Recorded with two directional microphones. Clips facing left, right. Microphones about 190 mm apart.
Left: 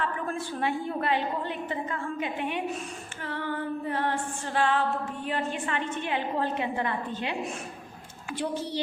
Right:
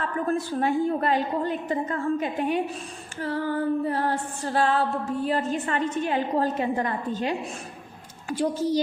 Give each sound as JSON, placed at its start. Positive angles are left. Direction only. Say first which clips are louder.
{"t": 0.0, "sound": "female singing", "louder": "right 5 dB", "side_deg": -40}